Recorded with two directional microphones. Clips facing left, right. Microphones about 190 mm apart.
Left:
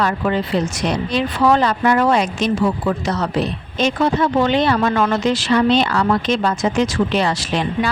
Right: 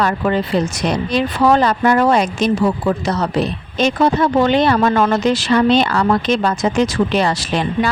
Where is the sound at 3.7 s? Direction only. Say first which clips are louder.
Right 2 dB; 40° right (ahead or behind).